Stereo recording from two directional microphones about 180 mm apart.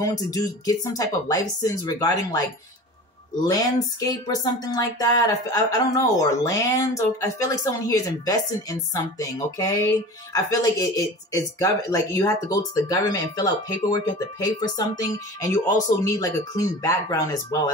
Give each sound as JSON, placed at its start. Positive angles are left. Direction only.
{"t": 0.0, "sound": "speech", "side_deg": 20}
{"t": 3.4, "sound": "speech", "side_deg": 20}